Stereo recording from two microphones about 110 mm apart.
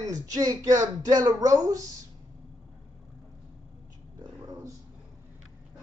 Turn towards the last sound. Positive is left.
turn(degrees=-35)  # may be behind; listen again after turning